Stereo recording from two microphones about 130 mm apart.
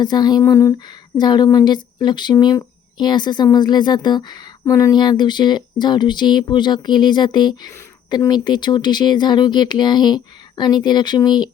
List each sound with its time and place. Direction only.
0.0 s speech: 35° left (ahead or behind)